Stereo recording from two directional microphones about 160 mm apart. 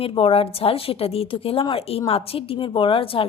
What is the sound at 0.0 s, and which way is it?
A woman's voice, 35° left (ahead or behind).